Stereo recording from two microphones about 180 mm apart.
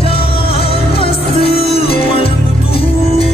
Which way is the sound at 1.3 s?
30° left (ahead or behind).